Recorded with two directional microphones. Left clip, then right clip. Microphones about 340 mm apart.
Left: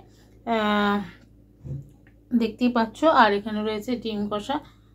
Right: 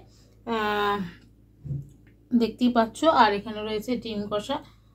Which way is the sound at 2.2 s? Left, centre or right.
Centre.